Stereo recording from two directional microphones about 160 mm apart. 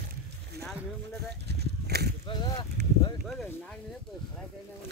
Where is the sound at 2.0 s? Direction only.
90° right.